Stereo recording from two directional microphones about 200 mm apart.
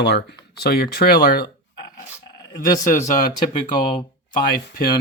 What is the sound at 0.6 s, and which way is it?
Speech, 50° left (ahead or behind).